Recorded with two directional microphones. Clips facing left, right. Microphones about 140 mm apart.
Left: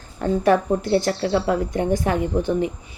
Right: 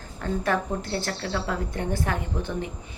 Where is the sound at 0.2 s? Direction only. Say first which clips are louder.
Left 8 dB; 15° left (ahead or behind).